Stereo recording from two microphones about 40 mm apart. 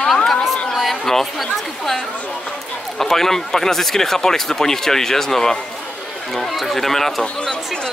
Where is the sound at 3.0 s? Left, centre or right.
Centre.